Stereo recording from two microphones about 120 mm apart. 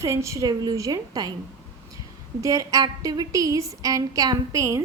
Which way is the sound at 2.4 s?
30° right (ahead or behind).